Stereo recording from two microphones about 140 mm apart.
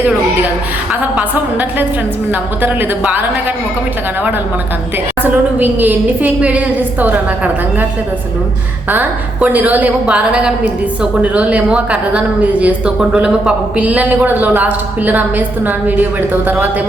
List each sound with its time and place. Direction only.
1.1 s a woman's voice: 10° right (ahead or behind)
5.2 s a woman's voice: 10° right (ahead or behind)
8.9 s a woman's voice: 10° right (ahead or behind)